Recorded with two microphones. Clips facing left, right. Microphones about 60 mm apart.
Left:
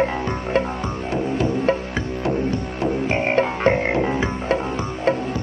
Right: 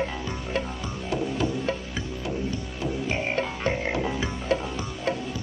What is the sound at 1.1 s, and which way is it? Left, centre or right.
Didgeridoo, left.